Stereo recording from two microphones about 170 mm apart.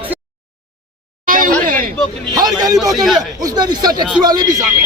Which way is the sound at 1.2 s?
50° right (ahead or behind).